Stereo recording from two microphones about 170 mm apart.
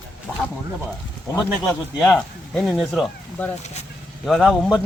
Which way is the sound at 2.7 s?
Centre (ahead or behind).